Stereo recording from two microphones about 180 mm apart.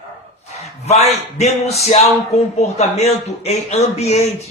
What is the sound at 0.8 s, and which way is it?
A man's voice, 35° left (ahead or behind).